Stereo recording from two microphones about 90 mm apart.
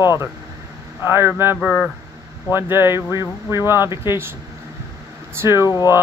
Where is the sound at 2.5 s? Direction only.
25° right (ahead or behind).